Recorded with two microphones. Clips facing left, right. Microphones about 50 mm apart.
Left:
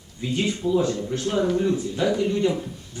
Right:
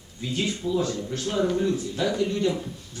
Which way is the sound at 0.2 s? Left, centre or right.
Centre.